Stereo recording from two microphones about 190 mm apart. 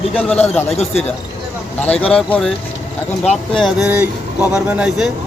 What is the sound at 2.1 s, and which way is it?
Speech, 5° left (ahead or behind).